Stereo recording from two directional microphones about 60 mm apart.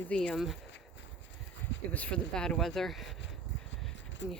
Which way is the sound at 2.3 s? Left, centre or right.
Centre.